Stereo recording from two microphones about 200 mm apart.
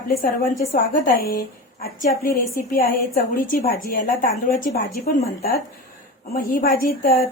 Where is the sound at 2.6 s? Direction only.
45° left (ahead or behind).